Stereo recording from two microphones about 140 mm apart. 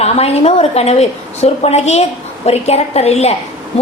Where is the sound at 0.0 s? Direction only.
45° left (ahead or behind).